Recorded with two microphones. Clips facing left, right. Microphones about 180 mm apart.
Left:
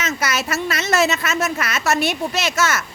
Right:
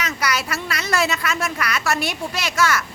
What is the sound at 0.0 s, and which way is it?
A woman's voice, 25° left (ahead or behind).